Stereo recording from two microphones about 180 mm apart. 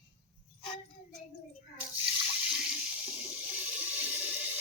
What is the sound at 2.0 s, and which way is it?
Water, 5° right (ahead or behind).